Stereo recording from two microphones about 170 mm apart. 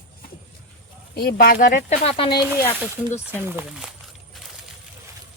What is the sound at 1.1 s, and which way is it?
Speech, 65° left (ahead or behind).